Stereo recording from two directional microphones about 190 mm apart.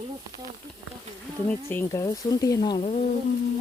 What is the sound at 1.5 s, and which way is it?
Speech, 10° left (ahead or behind).